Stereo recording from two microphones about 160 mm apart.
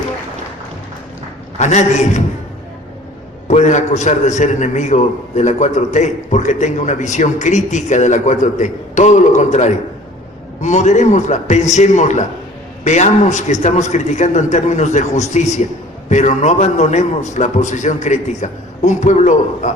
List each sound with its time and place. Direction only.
1.5 s a man's voice: 45° left (ahead or behind)
3.5 s a man's voice: 45° left (ahead or behind)